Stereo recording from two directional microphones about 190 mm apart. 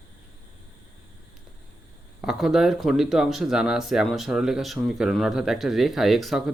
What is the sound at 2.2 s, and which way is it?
Speech, centre (ahead or behind).